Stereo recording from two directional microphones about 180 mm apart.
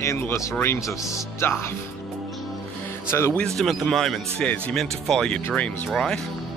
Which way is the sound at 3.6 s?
Centre (ahead or behind).